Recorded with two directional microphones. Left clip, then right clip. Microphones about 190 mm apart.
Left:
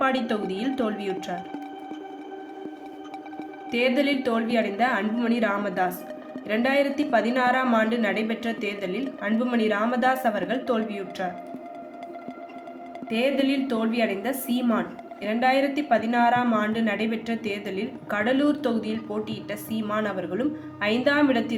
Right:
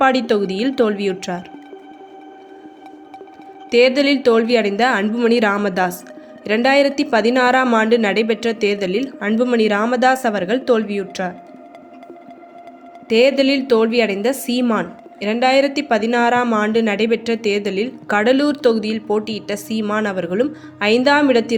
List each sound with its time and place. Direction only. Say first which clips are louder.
0.0 s a woman's voice: right 9 dB; 45° right (ahead or behind)
3.7 s a woman's voice: right 10 dB; 45° right (ahead or behind)
13.1 s a woman's voice: right 10 dB; 50° right (ahead or behind)